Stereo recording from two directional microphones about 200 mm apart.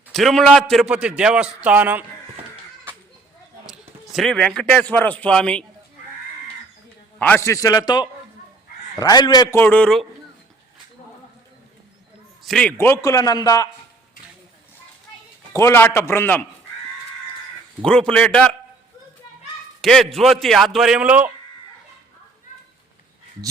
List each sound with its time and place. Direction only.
0.1 s a man's voice: centre (ahead or behind)
3.7 s a man's voice: centre (ahead or behind)
7.2 s a man's voice: 10° left (ahead or behind)
12.5 s a man's voice: 5° left (ahead or behind)
15.5 s a man's voice: 10° left (ahead or behind)
17.8 s a man's voice: 5° left (ahead or behind)
19.8 s a man's voice: centre (ahead or behind)